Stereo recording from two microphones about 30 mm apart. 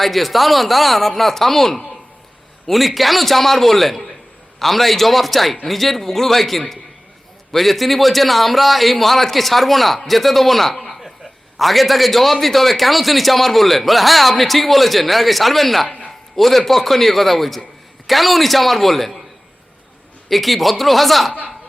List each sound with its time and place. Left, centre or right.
0.0 s a man's voice: centre
20.3 s a man's voice: centre